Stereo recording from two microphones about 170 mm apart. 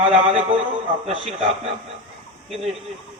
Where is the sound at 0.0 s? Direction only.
35° right (ahead or behind).